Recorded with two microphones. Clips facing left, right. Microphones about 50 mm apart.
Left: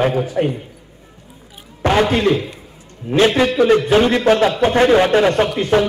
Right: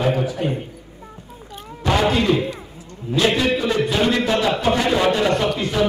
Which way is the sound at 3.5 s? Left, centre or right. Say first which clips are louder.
Left 8 dB; left.